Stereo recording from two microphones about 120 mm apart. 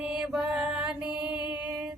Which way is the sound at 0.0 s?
5° right (ahead or behind).